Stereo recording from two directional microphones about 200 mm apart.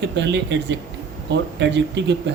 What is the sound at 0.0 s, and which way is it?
Speech, 60° right (ahead or behind).